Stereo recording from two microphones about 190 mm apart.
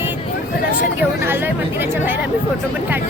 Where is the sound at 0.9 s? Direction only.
10° right (ahead or behind).